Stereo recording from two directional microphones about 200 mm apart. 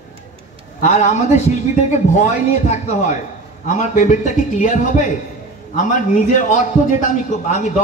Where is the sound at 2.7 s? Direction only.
35° left (ahead or behind).